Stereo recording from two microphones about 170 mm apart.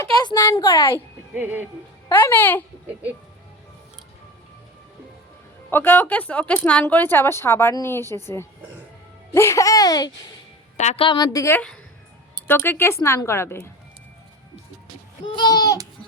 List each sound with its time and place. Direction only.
0.2 s a child's voice: 20° left (ahead or behind)
0.9 s a woman's voice: 10° right (ahead or behind)
2.0 s speech: 15° left (ahead or behind)
5.7 s a woman's voice: 10° left (ahead or behind)
10.8 s a woman's voice: 40° left (ahead or behind); by 13.7 s 15° left (ahead or behind)
15.4 s goat: 25° left (ahead or behind)